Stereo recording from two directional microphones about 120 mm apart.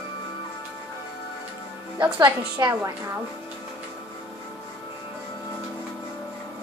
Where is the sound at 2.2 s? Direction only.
35° right (ahead or behind).